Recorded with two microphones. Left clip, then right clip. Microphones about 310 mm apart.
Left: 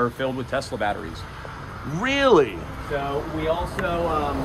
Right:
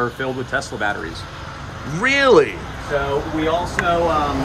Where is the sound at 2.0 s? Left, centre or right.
Centre.